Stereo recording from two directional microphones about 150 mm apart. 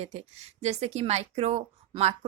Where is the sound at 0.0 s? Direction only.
45° right (ahead or behind).